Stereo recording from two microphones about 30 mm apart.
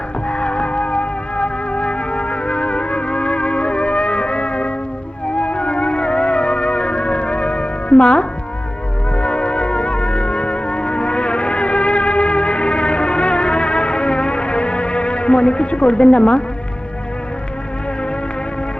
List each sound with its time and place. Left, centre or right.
0.3 s music: left